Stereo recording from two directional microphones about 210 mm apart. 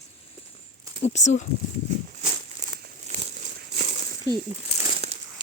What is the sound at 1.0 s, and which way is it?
Dog, 35° left (ahead or behind).